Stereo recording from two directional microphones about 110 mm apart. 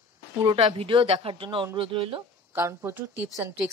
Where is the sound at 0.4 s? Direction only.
55° right (ahead or behind).